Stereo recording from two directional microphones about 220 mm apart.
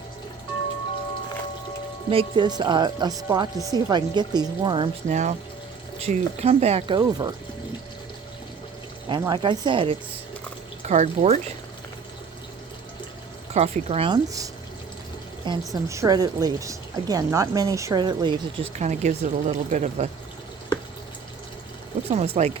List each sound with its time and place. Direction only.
2.0 s speech: 20° right (ahead or behind)
5.0 s speech: 35° right (ahead or behind)
9.0 s speech: 20° right (ahead or behind)
13.5 s speech: 30° right (ahead or behind)
22.1 s speech: 30° right (ahead or behind)